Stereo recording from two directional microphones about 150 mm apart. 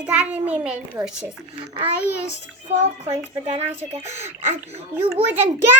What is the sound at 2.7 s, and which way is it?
A child's voice, 40° right (ahead or behind).